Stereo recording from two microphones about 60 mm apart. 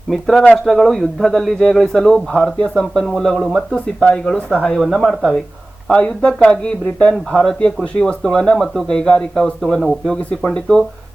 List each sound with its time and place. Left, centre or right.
0.1 s speech: centre
5.9 s speech: centre